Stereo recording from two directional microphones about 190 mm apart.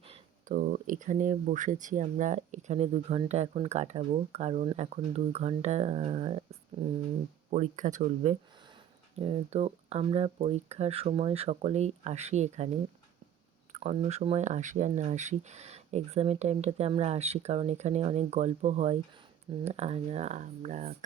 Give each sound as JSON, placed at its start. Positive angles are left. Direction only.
{"t": 0.4, "sound": "speech", "side_deg": -45}
{"t": 13.7, "sound": "speech", "side_deg": -35}